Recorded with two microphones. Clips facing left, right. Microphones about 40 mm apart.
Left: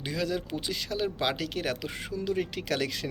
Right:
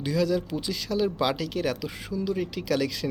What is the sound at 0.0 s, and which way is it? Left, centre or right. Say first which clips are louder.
Speech: right 6 dB; left.